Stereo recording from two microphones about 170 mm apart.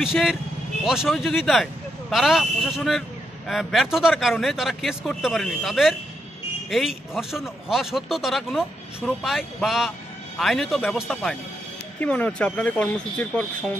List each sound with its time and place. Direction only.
0.0 s speech: centre (ahead or behind)